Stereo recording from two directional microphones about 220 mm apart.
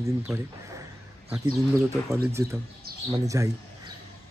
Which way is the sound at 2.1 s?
15° right (ahead or behind).